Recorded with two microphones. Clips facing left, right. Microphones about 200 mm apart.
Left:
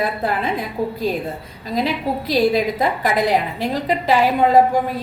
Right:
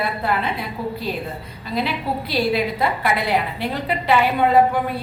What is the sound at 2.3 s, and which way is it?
A woman's voice, 40° left (ahead or behind).